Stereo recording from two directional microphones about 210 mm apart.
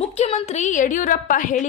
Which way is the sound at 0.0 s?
30° left (ahead or behind).